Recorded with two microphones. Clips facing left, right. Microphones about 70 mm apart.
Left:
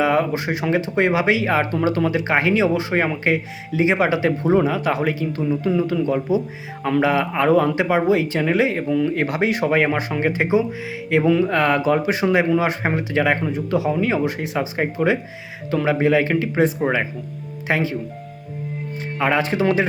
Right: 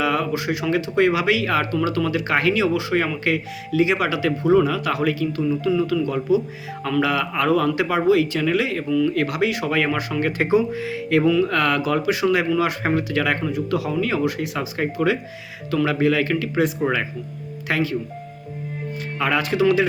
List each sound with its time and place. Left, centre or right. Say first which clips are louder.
0.0 s speech: left 3 dB; left
19.2 s speech: even; left